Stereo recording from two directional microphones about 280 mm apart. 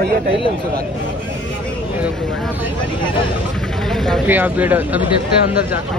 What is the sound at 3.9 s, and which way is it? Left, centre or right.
Speech, centre.